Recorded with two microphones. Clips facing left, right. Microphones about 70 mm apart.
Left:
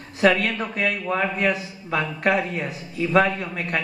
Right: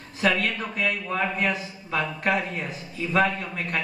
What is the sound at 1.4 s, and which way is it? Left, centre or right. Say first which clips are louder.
Speech: left 3 dB; left.